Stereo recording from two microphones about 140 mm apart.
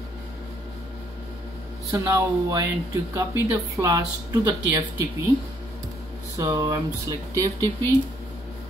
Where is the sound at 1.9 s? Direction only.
25° right (ahead or behind).